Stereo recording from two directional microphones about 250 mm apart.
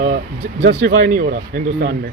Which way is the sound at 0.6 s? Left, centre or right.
Right.